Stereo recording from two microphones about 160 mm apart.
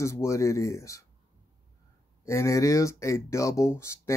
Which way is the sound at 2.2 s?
20° left (ahead or behind).